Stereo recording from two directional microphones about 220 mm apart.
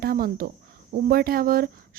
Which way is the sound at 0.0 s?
40° right (ahead or behind).